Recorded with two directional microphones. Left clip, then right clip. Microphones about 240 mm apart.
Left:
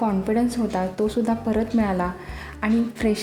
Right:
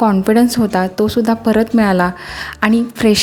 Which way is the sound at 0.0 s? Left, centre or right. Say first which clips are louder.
Right 10 dB; right.